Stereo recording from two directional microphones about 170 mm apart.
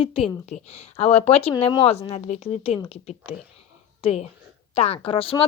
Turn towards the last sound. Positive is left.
turn(degrees=35)  # may be behind; listen again after turning